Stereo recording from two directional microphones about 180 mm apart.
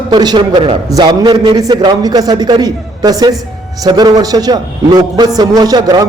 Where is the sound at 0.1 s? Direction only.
25° right (ahead or behind).